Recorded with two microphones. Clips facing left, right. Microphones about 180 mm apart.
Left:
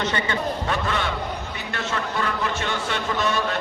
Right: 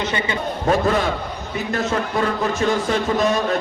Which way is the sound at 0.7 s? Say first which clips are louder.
Right 12 dB; 40° right (ahead or behind).